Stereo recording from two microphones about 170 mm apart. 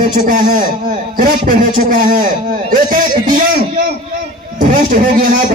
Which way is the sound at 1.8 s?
55° right (ahead or behind).